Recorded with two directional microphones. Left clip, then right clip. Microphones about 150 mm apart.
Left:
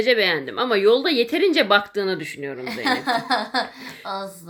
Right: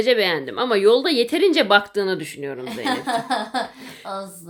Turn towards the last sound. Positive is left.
turn(degrees=-5)  # may be behind; listen again after turning